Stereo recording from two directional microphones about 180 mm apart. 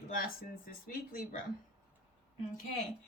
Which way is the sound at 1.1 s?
50° left (ahead or behind).